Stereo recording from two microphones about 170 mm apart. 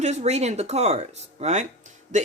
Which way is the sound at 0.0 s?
40° right (ahead or behind).